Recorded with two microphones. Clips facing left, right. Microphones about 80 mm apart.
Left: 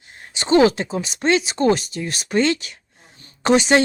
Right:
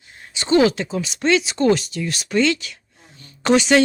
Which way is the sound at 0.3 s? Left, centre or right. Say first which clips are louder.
Left 1 dB; left.